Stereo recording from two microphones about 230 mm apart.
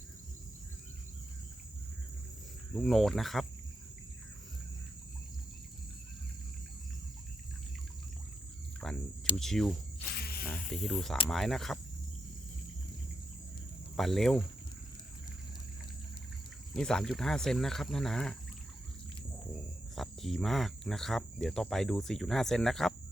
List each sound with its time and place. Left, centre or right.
2.7 s speech: centre
8.8 s cricket: centre
9.4 s speech: centre
10.2 s a sound: left
10.5 s speech: centre
13.9 s speech: centre
16.7 s speech: centre
20.0 s speech: centre